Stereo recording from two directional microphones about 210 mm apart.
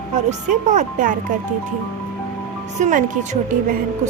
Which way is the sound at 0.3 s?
35° right (ahead or behind).